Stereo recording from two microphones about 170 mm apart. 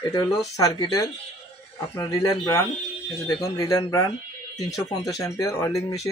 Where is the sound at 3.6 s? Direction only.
20° left (ahead or behind).